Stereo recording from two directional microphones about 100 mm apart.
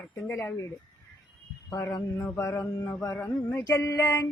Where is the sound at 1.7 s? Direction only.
30° left (ahead or behind).